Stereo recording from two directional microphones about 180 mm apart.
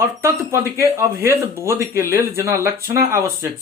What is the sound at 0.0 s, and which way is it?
Speech, 15° right (ahead or behind).